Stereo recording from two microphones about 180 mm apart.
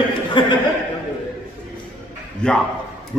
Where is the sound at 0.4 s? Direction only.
25° left (ahead or behind).